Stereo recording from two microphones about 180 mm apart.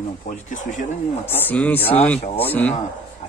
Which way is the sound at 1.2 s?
10° left (ahead or behind).